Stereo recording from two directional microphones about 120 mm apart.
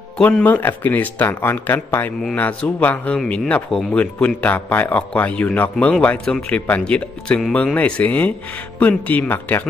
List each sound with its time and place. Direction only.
0.2 s a man's voice: 10° left (ahead or behind)